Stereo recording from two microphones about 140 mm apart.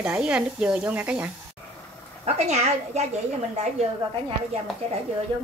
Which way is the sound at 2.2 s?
50° right (ahead or behind).